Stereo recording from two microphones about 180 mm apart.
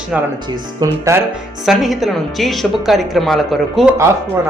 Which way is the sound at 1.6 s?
Centre (ahead or behind).